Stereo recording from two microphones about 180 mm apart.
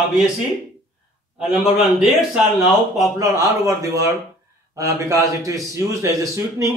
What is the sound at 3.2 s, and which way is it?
Speech, 20° right (ahead or behind).